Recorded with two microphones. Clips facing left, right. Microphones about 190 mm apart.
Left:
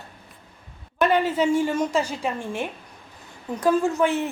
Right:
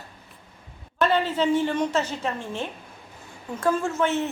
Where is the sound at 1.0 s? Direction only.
15° left (ahead or behind).